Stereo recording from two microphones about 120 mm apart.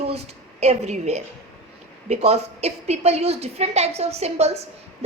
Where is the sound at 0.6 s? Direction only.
70° right (ahead or behind).